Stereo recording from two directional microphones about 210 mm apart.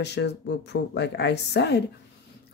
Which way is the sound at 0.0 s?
55° left (ahead or behind).